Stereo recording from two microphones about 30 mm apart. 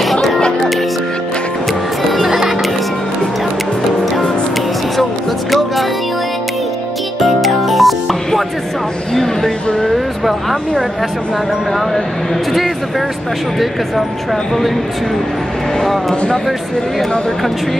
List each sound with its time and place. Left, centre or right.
0.0 s music: centre
1.7 s music: centre
2.2 s music: centre
4.0 s music: centre
5.5 s music: centre
7.2 s music: centre
9.1 s a sound: centre
13.6 s speech: centre
15.8 s speech: centre